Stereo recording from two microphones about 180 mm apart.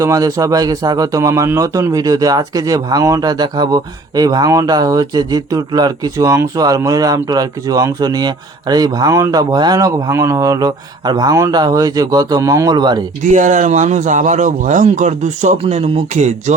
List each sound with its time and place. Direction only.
0.0 s speech: 20° right (ahead or behind)
13.2 s a man's voice: 45° right (ahead or behind)